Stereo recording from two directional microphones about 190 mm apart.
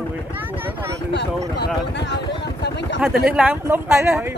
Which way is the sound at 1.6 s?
65° left (ahead or behind).